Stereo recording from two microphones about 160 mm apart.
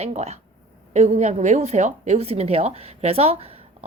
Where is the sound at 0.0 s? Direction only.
45° right (ahead or behind).